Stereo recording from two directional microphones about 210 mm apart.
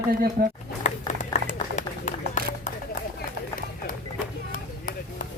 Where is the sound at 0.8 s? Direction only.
35° left (ahead or behind).